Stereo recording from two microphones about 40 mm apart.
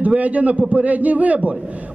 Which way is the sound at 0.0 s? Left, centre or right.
Right.